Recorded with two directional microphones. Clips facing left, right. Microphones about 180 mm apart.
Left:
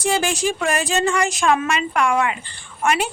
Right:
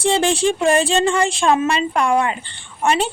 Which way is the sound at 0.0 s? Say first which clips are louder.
Right 4 dB; 30° right (ahead or behind).